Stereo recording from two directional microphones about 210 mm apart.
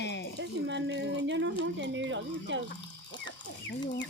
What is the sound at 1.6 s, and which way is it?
Speech, 60° right (ahead or behind).